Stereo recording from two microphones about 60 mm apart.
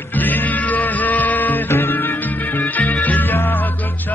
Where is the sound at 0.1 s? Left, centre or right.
Left.